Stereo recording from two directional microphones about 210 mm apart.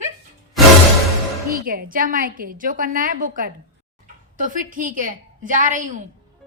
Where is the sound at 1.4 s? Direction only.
45° right (ahead or behind).